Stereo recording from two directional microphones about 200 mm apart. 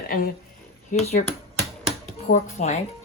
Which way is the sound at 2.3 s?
60° left (ahead or behind).